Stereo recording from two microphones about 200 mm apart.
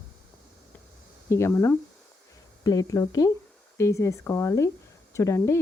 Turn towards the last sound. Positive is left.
turn(degrees=15)  # may be behind; listen again after turning